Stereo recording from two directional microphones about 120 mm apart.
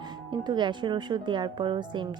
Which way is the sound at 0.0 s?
35° right (ahead or behind).